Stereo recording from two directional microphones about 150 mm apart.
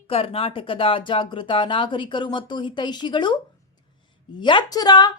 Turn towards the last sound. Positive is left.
turn(degrees=25)  # may be behind; listen again after turning